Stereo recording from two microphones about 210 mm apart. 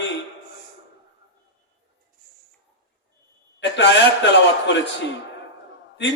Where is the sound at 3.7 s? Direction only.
55° left (ahead or behind).